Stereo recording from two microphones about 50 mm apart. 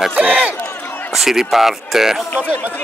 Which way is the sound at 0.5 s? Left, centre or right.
Left.